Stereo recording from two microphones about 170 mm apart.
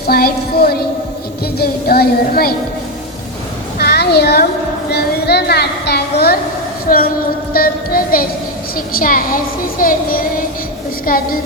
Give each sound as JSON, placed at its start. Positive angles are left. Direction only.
{"t": 0.1, "sound": "a woman's voice", "side_deg": 65}
{"t": 3.8, "sound": "a sound", "side_deg": 70}
{"t": 4.9, "sound": "a woman's voice", "side_deg": 70}
{"t": 6.9, "sound": "a woman's voice", "side_deg": 55}